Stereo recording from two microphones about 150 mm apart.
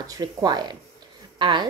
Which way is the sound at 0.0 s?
25° right (ahead or behind).